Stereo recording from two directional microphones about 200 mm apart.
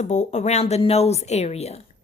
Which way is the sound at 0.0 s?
35° left (ahead or behind).